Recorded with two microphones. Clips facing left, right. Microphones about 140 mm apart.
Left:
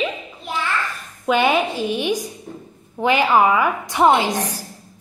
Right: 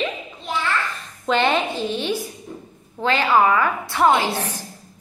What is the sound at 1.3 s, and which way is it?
A woman's voice, 10° left (ahead or behind).